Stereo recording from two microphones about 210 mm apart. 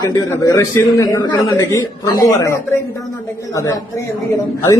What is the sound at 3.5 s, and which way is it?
Speech, 15° left (ahead or behind).